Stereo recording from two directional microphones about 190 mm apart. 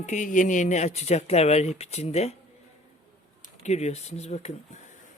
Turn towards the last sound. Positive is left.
turn(degrees=35)  # may be behind; listen again after turning